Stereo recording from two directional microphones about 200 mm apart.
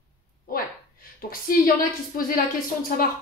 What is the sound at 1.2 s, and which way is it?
Speech, 45° left (ahead or behind).